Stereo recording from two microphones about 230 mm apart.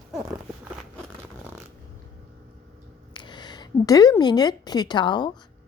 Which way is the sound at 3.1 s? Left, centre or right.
Centre.